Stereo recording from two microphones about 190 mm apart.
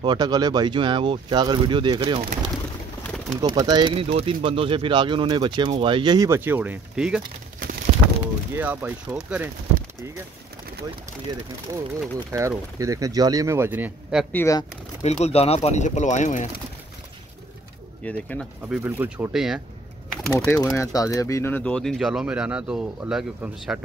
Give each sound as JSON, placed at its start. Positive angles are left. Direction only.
{"t": 0.0, "sound": "speech", "side_deg": -20}
{"t": 3.3, "sound": "speech", "side_deg": -20}
{"t": 11.7, "sound": "speech", "side_deg": -15}
{"t": 14.3, "sound": "speech", "side_deg": 15}
{"t": 15.0, "sound": "speech", "side_deg": 35}
{"t": 18.0, "sound": "speech", "side_deg": 5}
{"t": 18.7, "sound": "speech", "side_deg": -10}
{"t": 20.3, "sound": "speech", "side_deg": 15}